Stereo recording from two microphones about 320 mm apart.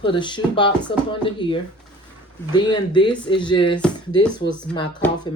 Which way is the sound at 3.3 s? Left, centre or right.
Centre.